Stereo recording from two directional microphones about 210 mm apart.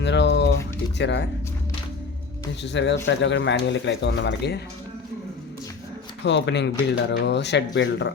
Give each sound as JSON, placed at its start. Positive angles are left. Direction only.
{"t": 0.0, "sound": "pigeon", "side_deg": 55}
{"t": 0.9, "sound": "speech", "side_deg": 55}
{"t": 2.7, "sound": "speech", "side_deg": 55}
{"t": 6.2, "sound": "speech", "side_deg": 55}